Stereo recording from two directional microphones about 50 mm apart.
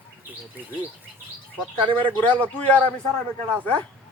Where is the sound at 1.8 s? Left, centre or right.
Left.